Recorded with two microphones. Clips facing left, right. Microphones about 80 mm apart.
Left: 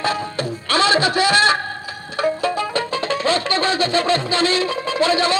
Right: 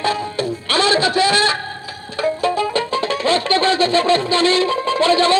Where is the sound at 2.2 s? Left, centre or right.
Left.